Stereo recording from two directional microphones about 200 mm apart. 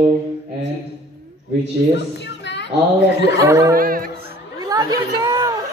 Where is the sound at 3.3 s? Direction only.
15° right (ahead or behind).